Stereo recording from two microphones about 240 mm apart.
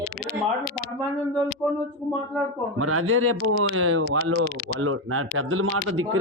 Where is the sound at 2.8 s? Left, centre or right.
Right.